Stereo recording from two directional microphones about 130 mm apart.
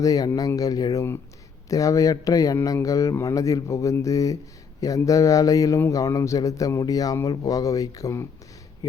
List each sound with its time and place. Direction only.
0.0 s speech: 25° left (ahead or behind)